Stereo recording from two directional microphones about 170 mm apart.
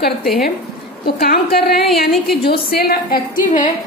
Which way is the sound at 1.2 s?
65° left (ahead or behind).